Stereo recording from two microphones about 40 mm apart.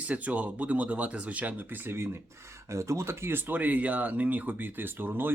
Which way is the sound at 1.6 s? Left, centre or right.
Right.